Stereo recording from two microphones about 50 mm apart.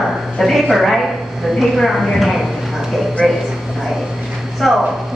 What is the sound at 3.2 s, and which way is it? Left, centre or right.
Speech, centre.